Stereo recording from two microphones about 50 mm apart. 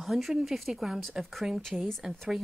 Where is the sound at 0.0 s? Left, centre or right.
Centre.